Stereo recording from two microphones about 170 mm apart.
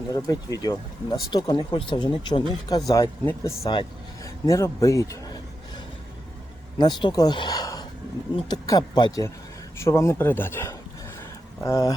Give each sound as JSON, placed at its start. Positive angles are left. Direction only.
{"t": 0.1, "sound": "speech", "side_deg": 20}
{"t": 3.6, "sound": "a sound", "side_deg": 20}
{"t": 6.7, "sound": "speech", "side_deg": 25}